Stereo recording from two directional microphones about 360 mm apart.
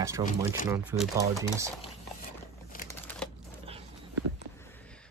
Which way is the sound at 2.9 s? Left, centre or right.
Centre.